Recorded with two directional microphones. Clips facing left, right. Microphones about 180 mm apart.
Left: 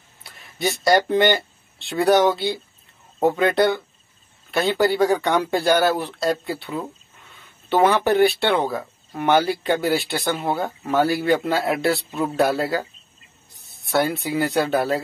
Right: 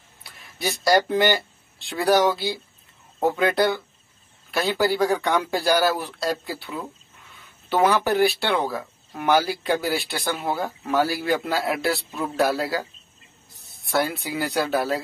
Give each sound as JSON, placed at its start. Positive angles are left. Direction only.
{"t": 0.6, "sound": "speech", "side_deg": 0}